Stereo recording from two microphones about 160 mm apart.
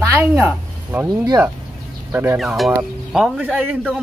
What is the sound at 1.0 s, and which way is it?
Speech, 25° right (ahead or behind).